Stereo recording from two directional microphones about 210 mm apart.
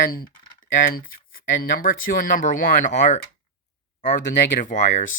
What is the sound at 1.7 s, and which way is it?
Speech, 45° left (ahead or behind).